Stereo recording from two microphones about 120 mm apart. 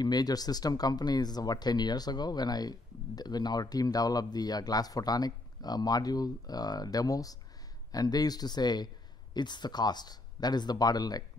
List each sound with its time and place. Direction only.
0.0 s speech: 35° left (ahead or behind)